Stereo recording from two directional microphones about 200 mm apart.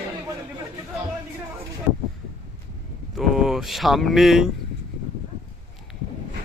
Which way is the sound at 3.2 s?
Centre (ahead or behind).